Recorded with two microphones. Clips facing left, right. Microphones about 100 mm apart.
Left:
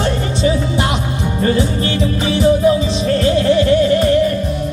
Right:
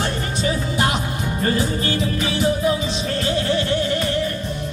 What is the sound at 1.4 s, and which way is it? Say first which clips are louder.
Music: left 5 dB; 35° left (ahead or behind).